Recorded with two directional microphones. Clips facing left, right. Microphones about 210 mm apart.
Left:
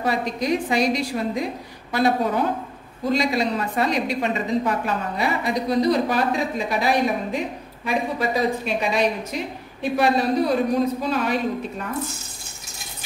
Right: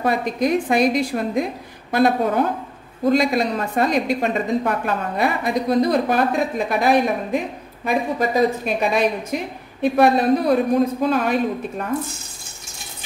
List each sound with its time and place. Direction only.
0.0 s a woman's voice: 55° right (ahead or behind)